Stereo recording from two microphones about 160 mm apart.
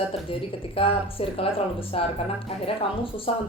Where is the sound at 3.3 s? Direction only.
40° left (ahead or behind).